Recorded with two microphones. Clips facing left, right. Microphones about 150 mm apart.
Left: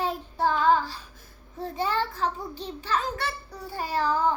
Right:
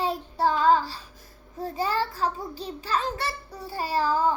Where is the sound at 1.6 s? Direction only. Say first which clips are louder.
Right 1 dB; 10° right (ahead or behind).